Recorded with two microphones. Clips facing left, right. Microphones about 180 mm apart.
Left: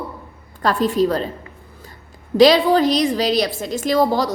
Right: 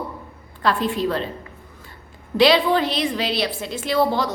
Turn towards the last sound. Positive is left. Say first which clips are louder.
# left 3 dB
turn(degrees=40)  # may be behind; listen again after turning